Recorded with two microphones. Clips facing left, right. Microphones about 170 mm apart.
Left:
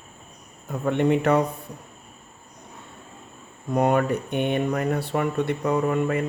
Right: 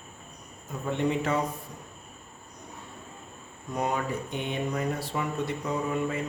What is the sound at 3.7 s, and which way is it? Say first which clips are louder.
Speech: left 9 dB; 60° left (ahead or behind).